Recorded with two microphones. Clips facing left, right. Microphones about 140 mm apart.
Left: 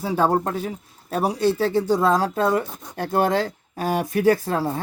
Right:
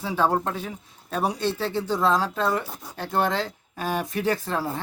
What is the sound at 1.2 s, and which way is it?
Speech, 10° left (ahead or behind).